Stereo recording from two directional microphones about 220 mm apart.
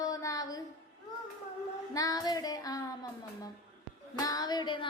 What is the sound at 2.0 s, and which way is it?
A child's voice, 15° left (ahead or behind).